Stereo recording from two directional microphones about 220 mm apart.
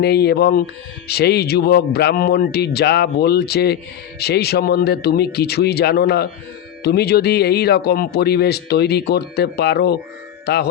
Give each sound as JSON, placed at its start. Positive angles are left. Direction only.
{"t": 0.0, "sound": "speech", "side_deg": 45}